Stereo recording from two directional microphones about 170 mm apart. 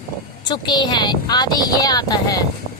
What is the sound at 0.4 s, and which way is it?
A woman's voice, 25° left (ahead or behind).